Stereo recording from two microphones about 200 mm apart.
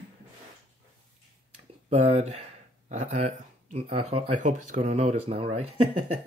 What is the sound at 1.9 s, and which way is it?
Speech, 30° right (ahead or behind).